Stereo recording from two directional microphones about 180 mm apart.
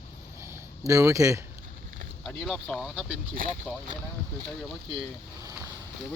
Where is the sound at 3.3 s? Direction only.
50° right (ahead or behind).